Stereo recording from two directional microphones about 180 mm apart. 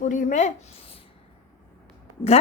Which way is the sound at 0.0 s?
45° left (ahead or behind).